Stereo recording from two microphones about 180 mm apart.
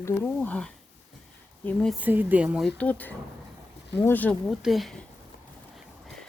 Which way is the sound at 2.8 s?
10° left (ahead or behind).